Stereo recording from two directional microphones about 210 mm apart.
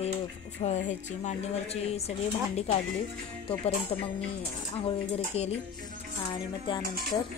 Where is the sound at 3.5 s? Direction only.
25° left (ahead or behind).